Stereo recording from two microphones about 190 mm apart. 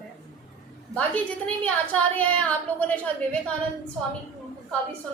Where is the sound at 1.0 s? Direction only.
10° left (ahead or behind).